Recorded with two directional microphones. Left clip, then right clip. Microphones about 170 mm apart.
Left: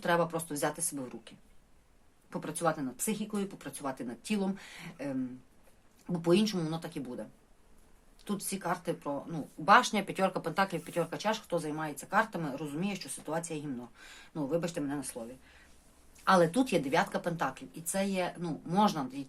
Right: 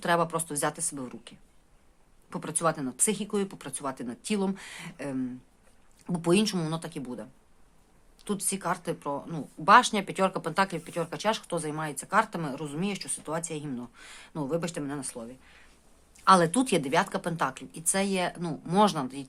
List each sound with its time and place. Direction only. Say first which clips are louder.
0.0 s speech: right 3 dB; 35° right (ahead or behind)
2.3 s speech: right 3 dB; 35° right (ahead or behind); by 11.1 s 15° right (ahead or behind)
11.1 s speech: right 3 dB; 35° right (ahead or behind)